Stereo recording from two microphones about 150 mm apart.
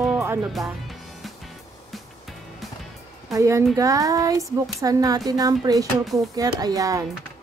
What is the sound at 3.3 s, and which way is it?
A woman's voice, 20° right (ahead or behind).